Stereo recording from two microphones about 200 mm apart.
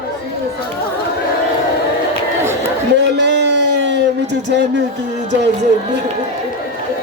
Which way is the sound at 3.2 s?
60° right (ahead or behind).